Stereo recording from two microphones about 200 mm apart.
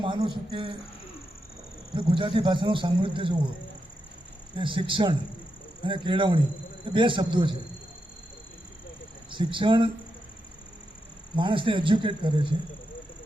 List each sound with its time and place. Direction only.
0.0 s a man's voice: 25° right (ahead or behind)
2.0 s a man's voice: 25° right (ahead or behind)
4.5 s a man's voice: 25° right (ahead or behind)
9.3 s a man's voice: 25° right (ahead or behind)
11.3 s a man's voice: 25° right (ahead or behind)